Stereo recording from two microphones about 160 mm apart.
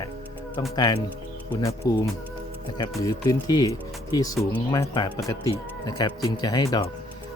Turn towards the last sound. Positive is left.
turn(degrees=25)  # may be behind; listen again after turning